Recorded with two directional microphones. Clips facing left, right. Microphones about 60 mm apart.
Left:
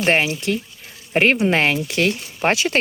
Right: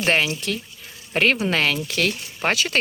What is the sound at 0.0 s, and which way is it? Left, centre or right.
Speech, centre.